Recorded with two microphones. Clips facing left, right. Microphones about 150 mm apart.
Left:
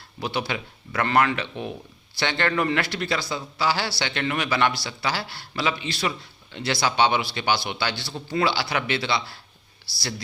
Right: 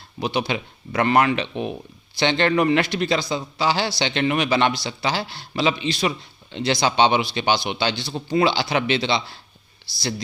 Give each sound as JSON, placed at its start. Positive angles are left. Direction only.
{"t": 0.2, "sound": "a man's voice", "side_deg": -20}